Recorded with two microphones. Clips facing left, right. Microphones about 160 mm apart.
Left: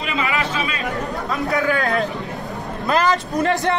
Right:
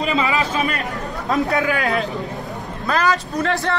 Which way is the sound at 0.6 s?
55° right (ahead or behind).